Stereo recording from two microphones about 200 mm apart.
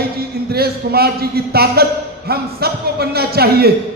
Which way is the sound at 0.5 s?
50° right (ahead or behind).